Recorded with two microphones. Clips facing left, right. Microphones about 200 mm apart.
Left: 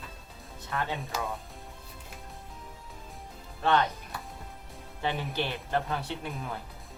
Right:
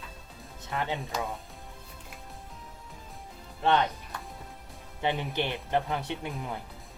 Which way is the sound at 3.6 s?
20° right (ahead or behind).